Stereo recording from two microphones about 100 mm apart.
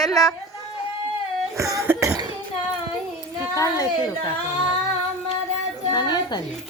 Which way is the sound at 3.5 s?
35° left (ahead or behind).